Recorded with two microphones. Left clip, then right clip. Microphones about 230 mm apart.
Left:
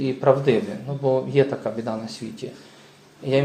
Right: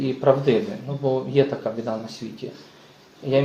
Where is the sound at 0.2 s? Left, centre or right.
Left.